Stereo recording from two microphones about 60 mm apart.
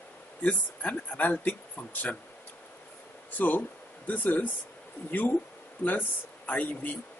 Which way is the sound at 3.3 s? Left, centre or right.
Left.